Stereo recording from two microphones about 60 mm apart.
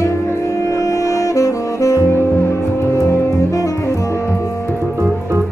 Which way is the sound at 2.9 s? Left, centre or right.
Left.